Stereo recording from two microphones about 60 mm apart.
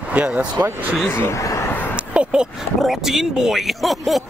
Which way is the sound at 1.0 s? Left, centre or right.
Left.